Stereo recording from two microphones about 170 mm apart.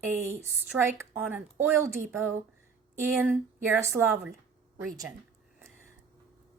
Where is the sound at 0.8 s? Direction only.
10° right (ahead or behind).